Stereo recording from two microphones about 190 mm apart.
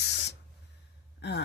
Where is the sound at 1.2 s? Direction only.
60° left (ahead or behind).